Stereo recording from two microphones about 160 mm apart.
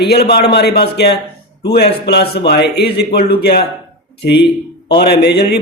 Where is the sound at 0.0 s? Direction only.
90° left.